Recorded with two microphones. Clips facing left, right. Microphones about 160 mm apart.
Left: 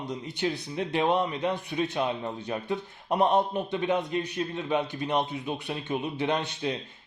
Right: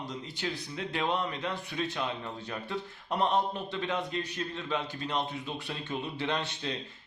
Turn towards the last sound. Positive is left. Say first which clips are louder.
# left 5 dB
turn(degrees=15)  # may be behind; listen again after turning